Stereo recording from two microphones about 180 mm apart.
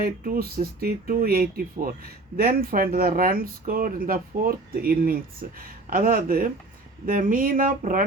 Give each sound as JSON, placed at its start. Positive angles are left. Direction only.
{"t": 0.0, "sound": "speech", "side_deg": -55}